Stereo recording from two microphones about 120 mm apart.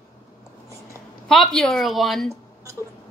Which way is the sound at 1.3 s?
5° left (ahead or behind).